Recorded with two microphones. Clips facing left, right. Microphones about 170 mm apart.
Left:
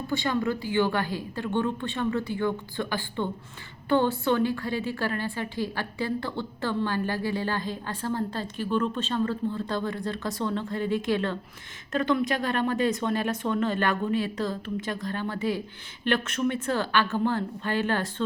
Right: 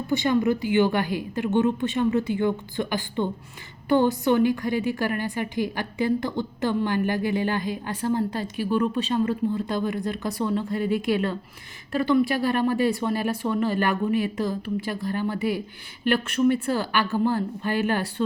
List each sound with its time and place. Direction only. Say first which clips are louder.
0.1 s a woman's voice: right 6 dB; 20° right (ahead or behind)